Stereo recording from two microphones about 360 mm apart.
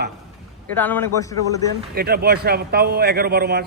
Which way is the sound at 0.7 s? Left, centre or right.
Centre.